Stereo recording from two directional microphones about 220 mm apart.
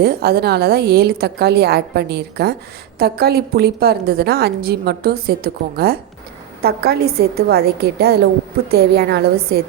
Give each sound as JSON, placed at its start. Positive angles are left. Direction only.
{"t": 0.0, "sound": "a woman's voice", "side_deg": -45}